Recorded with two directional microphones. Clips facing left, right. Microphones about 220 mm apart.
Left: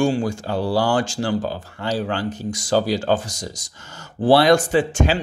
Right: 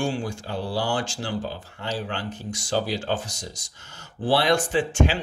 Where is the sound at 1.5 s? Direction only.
40° left (ahead or behind).